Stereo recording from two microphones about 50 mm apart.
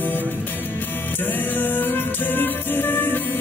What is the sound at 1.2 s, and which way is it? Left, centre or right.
Music, left.